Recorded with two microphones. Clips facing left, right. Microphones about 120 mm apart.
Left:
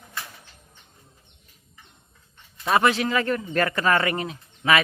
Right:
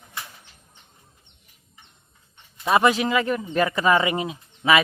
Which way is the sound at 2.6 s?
15° right (ahead or behind).